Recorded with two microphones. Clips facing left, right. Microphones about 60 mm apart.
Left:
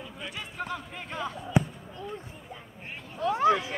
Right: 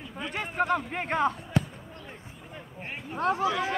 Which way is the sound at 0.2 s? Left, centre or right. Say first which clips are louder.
Right 9 dB; right.